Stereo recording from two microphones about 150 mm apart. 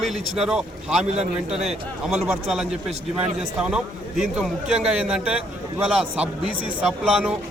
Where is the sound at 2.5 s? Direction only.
5° right (ahead or behind).